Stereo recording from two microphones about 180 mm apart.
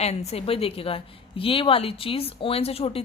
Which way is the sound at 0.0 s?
35° left (ahead or behind).